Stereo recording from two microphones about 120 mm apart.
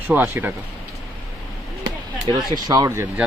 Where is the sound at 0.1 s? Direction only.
15° right (ahead or behind).